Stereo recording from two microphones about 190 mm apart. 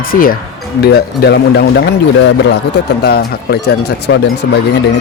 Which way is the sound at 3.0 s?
55° left (ahead or behind).